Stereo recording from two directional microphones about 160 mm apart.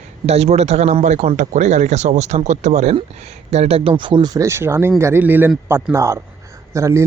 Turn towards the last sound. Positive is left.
turn(degrees=-20)  # may be behind; listen again after turning